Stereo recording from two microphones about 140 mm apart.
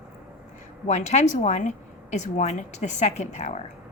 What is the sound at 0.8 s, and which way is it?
A woman's voice, 55° left (ahead or behind).